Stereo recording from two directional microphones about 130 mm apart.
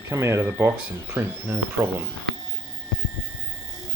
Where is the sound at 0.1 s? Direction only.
20° right (ahead or behind).